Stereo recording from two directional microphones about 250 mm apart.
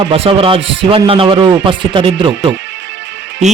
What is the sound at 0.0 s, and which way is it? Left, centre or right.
A man's voice, right.